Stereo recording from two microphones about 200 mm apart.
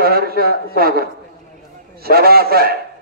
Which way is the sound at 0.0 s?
50° right (ahead or behind).